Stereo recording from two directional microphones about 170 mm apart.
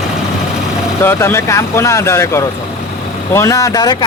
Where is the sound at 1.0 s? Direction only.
15° left (ahead or behind).